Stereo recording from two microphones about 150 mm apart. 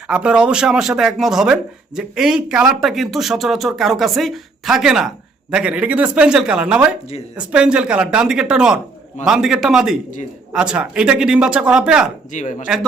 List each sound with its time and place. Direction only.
0.1 s speech: 5° right (ahead or behind)
12.3 s speech: 55° left (ahead or behind)